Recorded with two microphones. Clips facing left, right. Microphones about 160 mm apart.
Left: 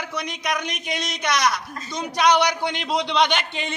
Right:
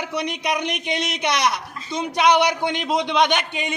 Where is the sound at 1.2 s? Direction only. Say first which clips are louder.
Left 1 dB; 25° right (ahead or behind).